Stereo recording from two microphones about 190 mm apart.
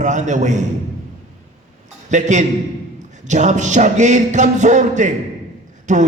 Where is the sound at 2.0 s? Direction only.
40° right (ahead or behind).